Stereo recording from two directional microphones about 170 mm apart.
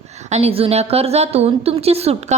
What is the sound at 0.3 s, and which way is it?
A woman's voice, 40° right (ahead or behind).